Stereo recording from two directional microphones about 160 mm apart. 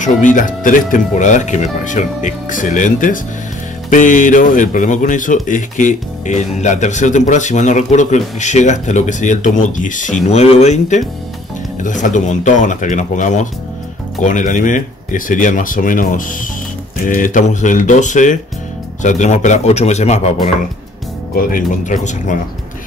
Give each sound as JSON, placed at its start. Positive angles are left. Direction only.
{"t": 0.0, "sound": "speech", "side_deg": 50}
{"t": 10.3, "sound": "speech", "side_deg": 40}
{"t": 21.4, "sound": "speech", "side_deg": 60}